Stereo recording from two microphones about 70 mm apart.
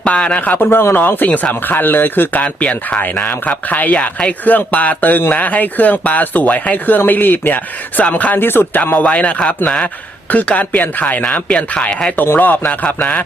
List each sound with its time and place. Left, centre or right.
0.0 s speech: centre
2.4 s speech: centre
10.3 s speech: left
12.1 s speech: left
12.6 s speech: centre